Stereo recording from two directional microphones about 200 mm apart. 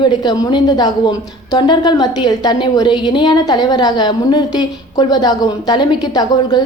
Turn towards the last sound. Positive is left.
turn(degrees=20)  # may be behind; listen again after turning